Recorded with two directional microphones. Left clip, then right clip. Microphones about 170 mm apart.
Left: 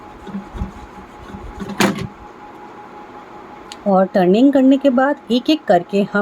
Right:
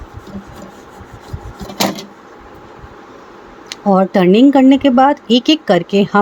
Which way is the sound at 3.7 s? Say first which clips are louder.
Right 2 dB; 50° right (ahead or behind).